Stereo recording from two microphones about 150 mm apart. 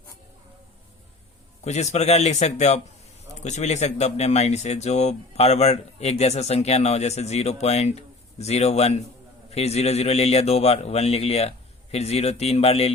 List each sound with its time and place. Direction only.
1.6 s speech: 50° left (ahead or behind)